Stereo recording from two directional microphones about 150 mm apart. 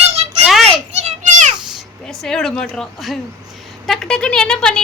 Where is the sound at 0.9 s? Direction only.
50° right (ahead or behind).